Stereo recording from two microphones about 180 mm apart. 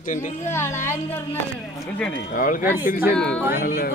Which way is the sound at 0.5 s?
15° left (ahead or behind).